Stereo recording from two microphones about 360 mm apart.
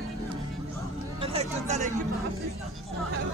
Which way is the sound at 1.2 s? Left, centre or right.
Centre.